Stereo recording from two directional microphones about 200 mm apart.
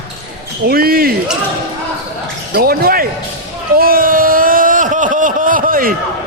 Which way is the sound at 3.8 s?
45° right (ahead or behind).